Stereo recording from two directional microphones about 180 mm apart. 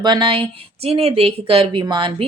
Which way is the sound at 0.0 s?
25° right (ahead or behind).